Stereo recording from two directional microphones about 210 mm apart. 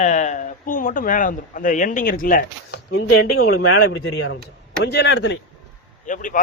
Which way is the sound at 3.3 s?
90° left.